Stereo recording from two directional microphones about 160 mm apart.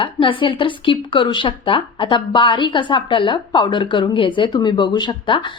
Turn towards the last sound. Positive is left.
turn(degrees=30)  # may be behind; listen again after turning